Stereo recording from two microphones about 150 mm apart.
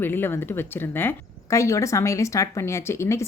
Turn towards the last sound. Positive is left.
turn(degrees=20)  # may be behind; listen again after turning